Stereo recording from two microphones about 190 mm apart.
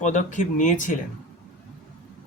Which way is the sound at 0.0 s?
40° left (ahead or behind).